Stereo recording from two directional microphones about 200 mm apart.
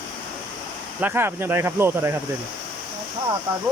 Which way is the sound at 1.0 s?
10° right (ahead or behind).